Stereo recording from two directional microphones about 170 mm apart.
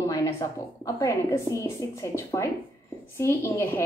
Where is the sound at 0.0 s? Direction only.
20° left (ahead or behind).